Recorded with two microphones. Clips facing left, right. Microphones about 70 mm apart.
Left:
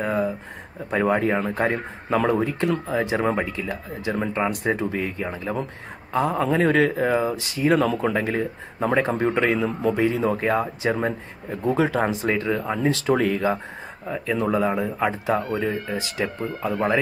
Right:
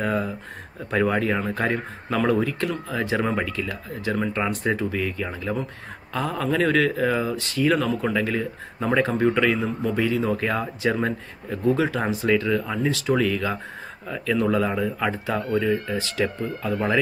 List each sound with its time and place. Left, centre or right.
0.0 s a sound: centre
0.8 s speech: left
7.3 s speech: centre
7.8 s speech: left
13.0 s speech: left
14.0 s speech: left